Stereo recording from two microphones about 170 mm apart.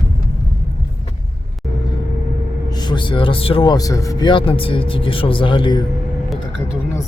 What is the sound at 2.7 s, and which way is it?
A man's voice, 25° left (ahead or behind).